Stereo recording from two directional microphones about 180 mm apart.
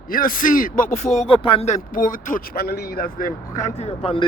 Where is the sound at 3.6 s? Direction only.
40° left (ahead or behind).